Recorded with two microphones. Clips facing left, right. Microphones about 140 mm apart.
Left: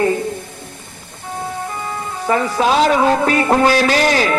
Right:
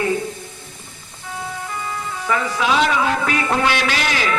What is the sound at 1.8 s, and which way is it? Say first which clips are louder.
Speech: left 3 dB; 40° left (ahead or behind).